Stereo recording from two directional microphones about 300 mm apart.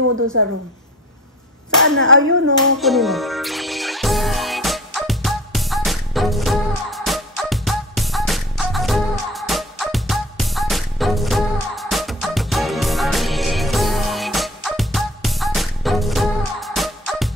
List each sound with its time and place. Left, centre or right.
1.8 s speech: right
2.8 s music: centre